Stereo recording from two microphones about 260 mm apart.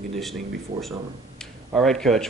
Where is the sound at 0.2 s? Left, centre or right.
Centre.